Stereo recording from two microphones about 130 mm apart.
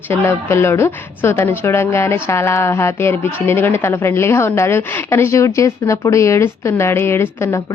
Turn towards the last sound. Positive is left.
turn(degrees=20)  # may be behind; listen again after turning